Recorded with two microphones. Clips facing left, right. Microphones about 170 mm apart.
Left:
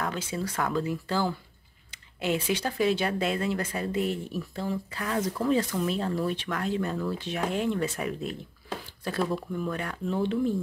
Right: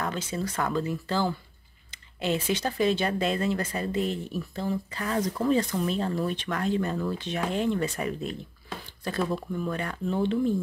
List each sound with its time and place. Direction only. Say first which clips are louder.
0.0 s speech: right 1 dB; 5° left (ahead or behind)